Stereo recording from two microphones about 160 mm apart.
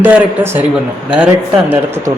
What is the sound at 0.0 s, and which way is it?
Speech, 15° right (ahead or behind).